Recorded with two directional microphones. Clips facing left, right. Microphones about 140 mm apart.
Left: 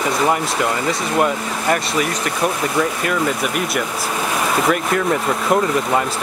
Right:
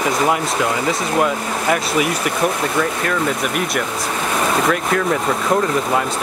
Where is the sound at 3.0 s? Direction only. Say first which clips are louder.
Even; centre (ahead or behind).